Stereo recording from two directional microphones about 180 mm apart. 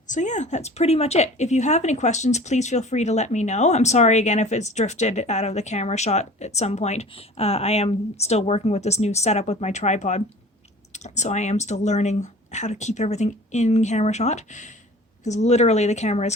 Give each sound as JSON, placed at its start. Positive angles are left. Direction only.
{"t": 0.1, "sound": "a woman's voice", "side_deg": 40}